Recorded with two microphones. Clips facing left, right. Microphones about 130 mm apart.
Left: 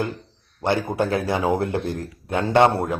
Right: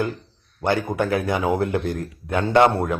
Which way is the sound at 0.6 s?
25° left (ahead or behind).